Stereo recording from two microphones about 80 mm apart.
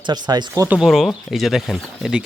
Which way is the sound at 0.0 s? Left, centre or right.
Right.